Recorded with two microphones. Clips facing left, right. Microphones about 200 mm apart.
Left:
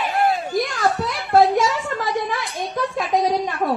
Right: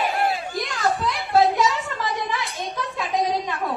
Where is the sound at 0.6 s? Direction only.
45° left (ahead or behind).